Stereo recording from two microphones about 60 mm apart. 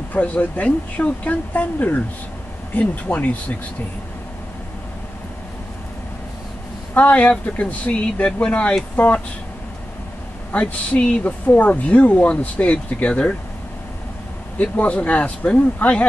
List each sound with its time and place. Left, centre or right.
0.1 s speech: left
6.9 s speech: left
10.5 s speech: centre
14.6 s speech: left